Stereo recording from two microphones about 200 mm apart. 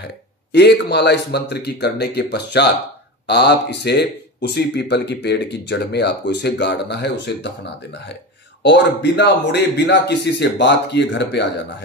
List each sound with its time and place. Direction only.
0.5 s speech: 55° left (ahead or behind)